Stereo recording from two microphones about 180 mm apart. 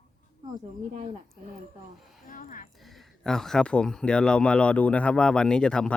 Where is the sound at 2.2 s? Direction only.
50° left (ahead or behind).